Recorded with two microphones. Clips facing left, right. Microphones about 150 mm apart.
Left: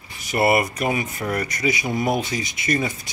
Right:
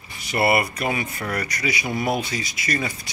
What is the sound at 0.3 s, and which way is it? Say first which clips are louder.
Speech: left 2 dB; 20° left (ahead or behind).